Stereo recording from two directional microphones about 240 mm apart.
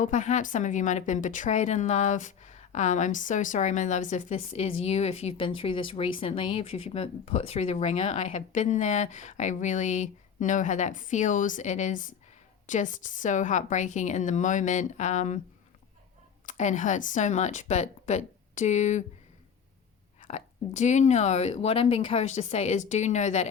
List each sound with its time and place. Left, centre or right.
0.0 s a woman's voice: left
16.5 s a woman's voice: left
20.2 s a woman's voice: left